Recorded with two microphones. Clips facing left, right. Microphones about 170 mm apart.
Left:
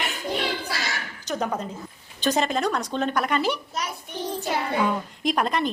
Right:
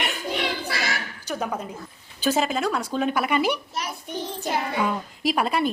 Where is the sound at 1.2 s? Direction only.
10° right (ahead or behind).